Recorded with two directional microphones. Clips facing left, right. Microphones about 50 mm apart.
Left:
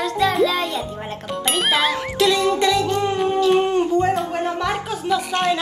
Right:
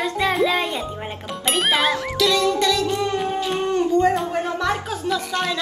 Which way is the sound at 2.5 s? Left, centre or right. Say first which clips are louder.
Left 2 dB; centre.